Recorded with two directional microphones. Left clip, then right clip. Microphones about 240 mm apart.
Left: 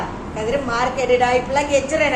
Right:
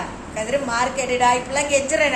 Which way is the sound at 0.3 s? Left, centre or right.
Centre.